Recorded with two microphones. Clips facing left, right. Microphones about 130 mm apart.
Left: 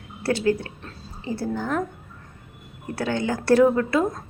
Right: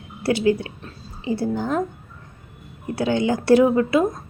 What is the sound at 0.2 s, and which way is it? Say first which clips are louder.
A woman's voice: right 3 dB; 15° right (ahead or behind).